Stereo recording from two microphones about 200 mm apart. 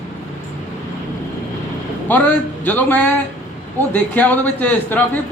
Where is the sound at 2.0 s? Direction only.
10° left (ahead or behind).